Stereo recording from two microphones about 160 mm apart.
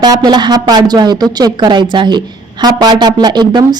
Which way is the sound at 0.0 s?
25° right (ahead or behind).